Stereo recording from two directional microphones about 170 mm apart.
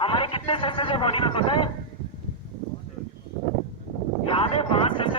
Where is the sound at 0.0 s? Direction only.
30° left (ahead or behind).